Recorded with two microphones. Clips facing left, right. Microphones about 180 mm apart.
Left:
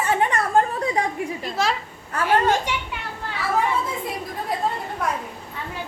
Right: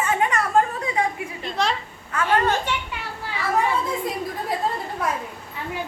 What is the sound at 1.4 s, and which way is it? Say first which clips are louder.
Speech: right 1 dB; 5° left (ahead or behind).